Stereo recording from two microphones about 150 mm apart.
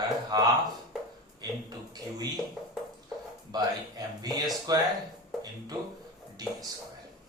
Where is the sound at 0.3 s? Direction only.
25° right (ahead or behind).